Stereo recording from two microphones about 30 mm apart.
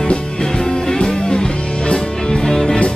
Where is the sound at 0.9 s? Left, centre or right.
Left.